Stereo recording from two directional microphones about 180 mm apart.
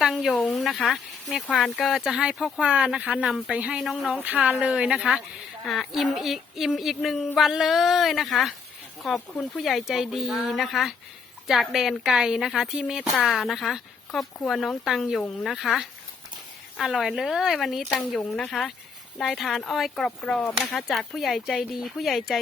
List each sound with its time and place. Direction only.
0.0 s speech: centre (ahead or behind)